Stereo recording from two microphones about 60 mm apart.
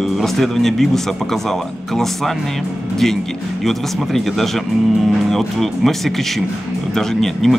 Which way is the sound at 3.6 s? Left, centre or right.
Centre.